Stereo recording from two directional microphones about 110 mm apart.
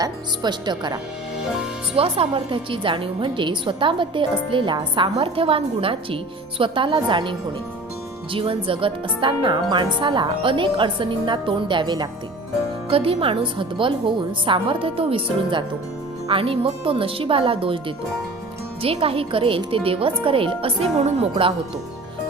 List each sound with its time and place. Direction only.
0.0 s speech: 40° right (ahead or behind)
2.0 s speech: 60° right (ahead or behind)
5.1 s speech: 55° right (ahead or behind)
12.9 s speech: 55° right (ahead or behind)